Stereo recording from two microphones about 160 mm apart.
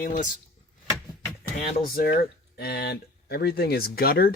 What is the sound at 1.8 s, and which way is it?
Speech, 65° left (ahead or behind).